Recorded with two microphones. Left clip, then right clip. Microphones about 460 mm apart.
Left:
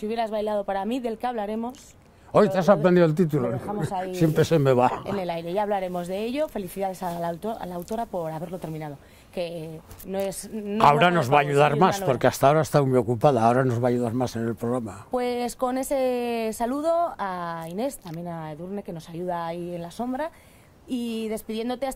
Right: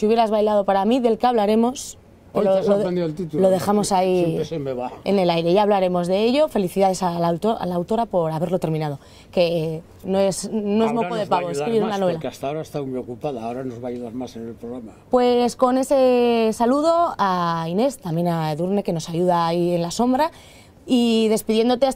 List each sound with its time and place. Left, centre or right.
0.0 s speech: right
2.3 s speech: left
3.5 s speech: right
4.4 s speech: left
5.0 s speech: right
10.9 s a man's voice: left
15.0 s speech: right